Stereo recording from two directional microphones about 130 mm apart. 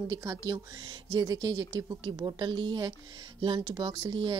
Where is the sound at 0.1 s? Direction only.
25° right (ahead or behind).